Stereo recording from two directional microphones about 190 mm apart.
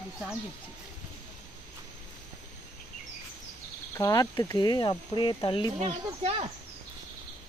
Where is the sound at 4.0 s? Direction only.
15° left (ahead or behind).